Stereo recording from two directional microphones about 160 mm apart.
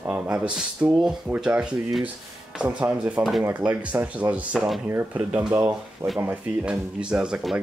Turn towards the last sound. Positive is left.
turn(degrees=-5)  # may be behind; listen again after turning